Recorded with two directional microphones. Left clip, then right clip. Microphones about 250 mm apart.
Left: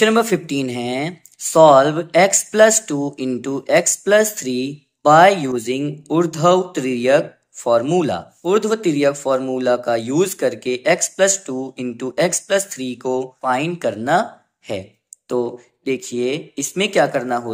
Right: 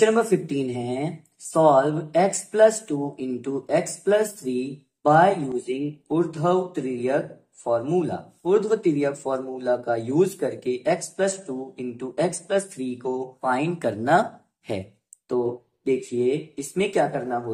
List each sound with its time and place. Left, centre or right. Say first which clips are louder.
0.0 s speech: left 4 dB; left